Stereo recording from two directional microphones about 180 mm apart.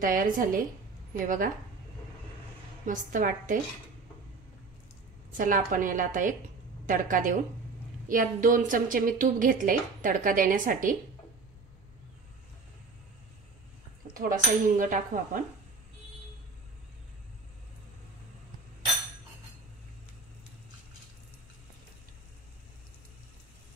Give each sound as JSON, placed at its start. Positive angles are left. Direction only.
{"t": 0.0, "sound": "a woman's voice", "side_deg": -50}
{"t": 2.8, "sound": "a woman's voice", "side_deg": -45}
{"t": 5.4, "sound": "a woman's voice", "side_deg": -50}
{"t": 14.1, "sound": "a woman's voice", "side_deg": -50}